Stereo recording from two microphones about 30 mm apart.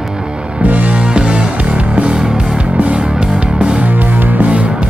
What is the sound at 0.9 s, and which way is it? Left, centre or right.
Music, right.